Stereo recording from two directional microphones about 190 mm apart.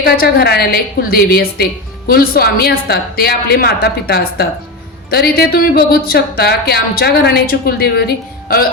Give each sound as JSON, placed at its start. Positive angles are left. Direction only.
{"t": 0.0, "sound": "a woman's voice", "side_deg": 55}